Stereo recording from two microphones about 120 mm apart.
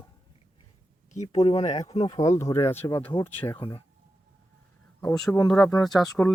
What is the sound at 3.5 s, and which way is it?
Speech, 45° left (ahead or behind).